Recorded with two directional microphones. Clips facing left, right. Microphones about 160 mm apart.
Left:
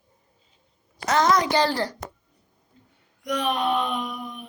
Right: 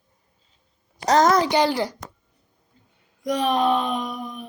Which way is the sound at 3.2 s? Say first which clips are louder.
Right 4 dB; 35° right (ahead or behind).